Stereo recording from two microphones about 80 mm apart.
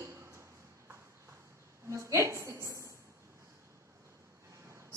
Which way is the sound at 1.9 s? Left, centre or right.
Right.